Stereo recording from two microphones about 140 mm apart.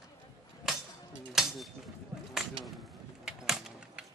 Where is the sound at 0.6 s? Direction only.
Centre (ahead or behind).